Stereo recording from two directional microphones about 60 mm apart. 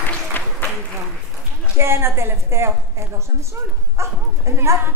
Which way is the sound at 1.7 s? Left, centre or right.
Right.